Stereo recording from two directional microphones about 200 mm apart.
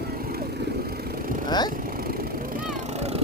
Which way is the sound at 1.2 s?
45° right (ahead or behind).